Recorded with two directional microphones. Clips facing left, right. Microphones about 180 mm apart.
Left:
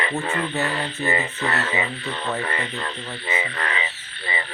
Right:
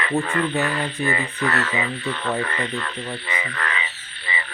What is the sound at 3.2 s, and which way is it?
Frog, 25° left (ahead or behind).